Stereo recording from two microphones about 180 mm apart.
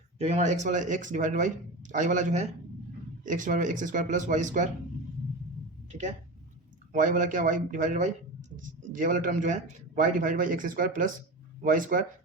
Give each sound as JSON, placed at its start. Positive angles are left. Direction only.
{"t": 0.2, "sound": "speech", "side_deg": -40}
{"t": 6.9, "sound": "speech", "side_deg": -45}